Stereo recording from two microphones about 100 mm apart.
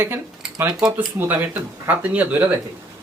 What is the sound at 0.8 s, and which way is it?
Speech, 10° right (ahead or behind).